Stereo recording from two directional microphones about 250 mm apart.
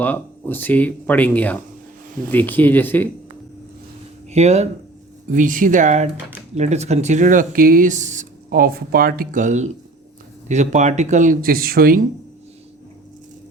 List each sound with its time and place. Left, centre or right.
0.0 s speech: centre
4.3 s speech: right